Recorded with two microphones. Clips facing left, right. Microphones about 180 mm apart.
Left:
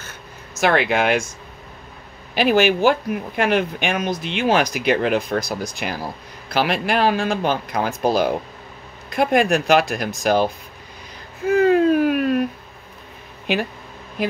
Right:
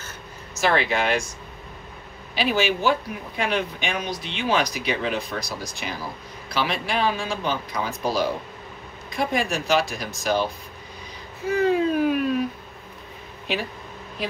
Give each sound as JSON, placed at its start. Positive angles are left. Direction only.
{"t": 0.6, "sound": "speech", "side_deg": 60}
{"t": 2.3, "sound": "speech", "side_deg": 55}